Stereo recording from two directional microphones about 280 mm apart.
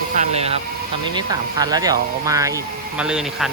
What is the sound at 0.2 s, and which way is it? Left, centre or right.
Speech, right.